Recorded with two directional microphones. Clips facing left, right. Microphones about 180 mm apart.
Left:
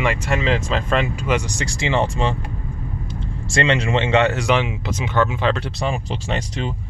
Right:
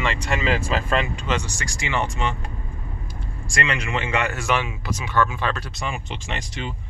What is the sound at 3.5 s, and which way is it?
Speech, 25° left (ahead or behind).